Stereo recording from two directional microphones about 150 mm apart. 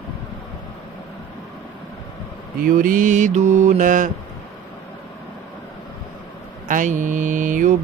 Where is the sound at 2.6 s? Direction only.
65° right (ahead or behind).